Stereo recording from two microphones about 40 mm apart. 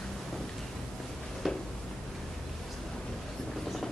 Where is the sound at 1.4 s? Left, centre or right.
Centre.